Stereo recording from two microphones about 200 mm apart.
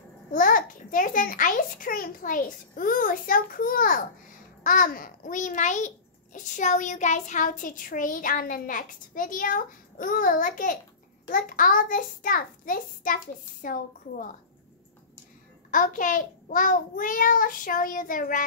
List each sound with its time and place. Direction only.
0.3 s a child's voice: 40° left (ahead or behind)
15.7 s a child's voice: 40° left (ahead or behind)